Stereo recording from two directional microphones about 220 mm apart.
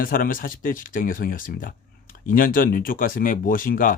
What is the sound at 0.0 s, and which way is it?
Speech, 40° left (ahead or behind).